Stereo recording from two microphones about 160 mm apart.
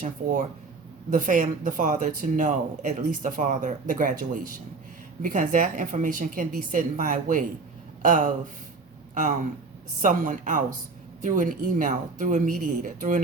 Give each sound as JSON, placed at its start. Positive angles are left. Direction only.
{"t": 0.0, "sound": "speech", "side_deg": -55}
{"t": 10.0, "sound": "speech", "side_deg": -55}